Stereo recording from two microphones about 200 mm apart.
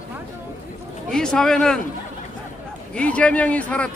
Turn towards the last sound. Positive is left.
turn(degrees=5)  # may be behind; listen again after turning